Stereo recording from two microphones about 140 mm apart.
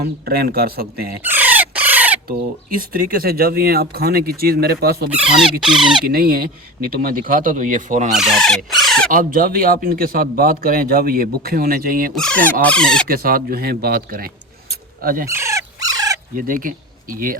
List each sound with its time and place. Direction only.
0.3 s a man's voice: 90° right
1.2 s a sound: 10° right (ahead or behind)
2.9 s a man's voice: 90° right
5.1 s speech: 5° right (ahead or behind)
6.1 s speech: 90° right; by 8.1 s 60° right (ahead or behind)
8.1 s speech: centre (ahead or behind)
9.0 s a man's voice: 90° right
12.1 s speech: 5° left (ahead or behind)
13.1 s a man's voice: 90° right
14.7 s a sound: 90° right
15.3 s dog: 20° right (ahead or behind)
16.3 s speech: 80° right